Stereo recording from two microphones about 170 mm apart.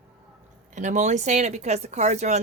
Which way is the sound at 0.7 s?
45° right (ahead or behind).